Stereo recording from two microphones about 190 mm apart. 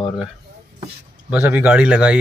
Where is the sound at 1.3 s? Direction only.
10° right (ahead or behind).